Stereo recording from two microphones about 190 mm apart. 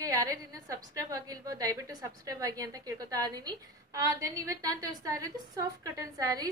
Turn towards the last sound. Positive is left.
turn(degrees=-20)  # may be behind; listen again after turning